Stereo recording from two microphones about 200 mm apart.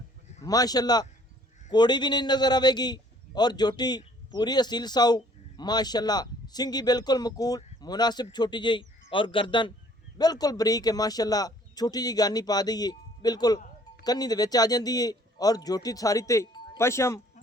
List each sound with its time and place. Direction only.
0.4 s a man's voice: 20° left (ahead or behind)